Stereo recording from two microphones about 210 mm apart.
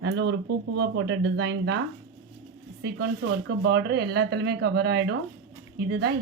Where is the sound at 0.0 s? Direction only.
50° right (ahead or behind).